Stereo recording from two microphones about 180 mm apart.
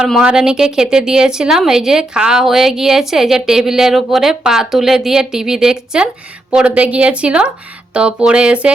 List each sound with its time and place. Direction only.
0.0 s a woman's voice: 5° right (ahead or behind)